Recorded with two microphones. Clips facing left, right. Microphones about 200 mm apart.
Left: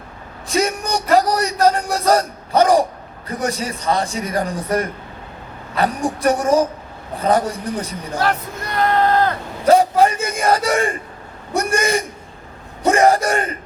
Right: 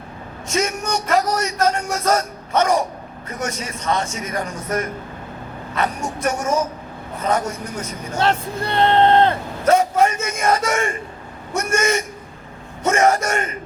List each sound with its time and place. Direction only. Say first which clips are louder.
0.4 s a man's voice: left 2 dB; 35° left (ahead or behind)
8.2 s speech: right 2 dB; 25° right (ahead or behind)
9.6 s a man's voice: left 3 dB; 35° left (ahead or behind)